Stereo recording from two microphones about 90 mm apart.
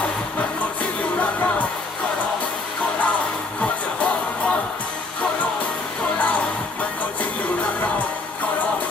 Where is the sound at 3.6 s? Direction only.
15° left (ahead or behind).